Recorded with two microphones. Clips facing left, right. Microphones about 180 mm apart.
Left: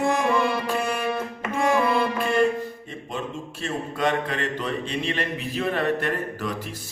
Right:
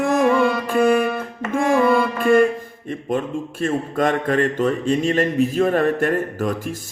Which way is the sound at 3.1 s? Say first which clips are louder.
Right 9 dB; 50° right (ahead or behind).